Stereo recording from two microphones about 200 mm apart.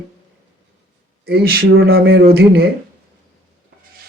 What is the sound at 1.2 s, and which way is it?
Speech, 50° right (ahead or behind).